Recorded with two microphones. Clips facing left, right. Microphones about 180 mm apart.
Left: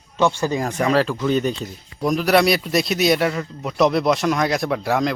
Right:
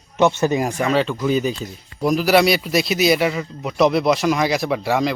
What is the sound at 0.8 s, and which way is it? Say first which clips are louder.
Speech: left 3 dB; centre (ahead or behind).